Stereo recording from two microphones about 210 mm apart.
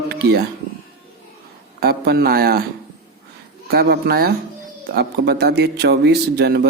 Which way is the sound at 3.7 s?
50° right (ahead or behind).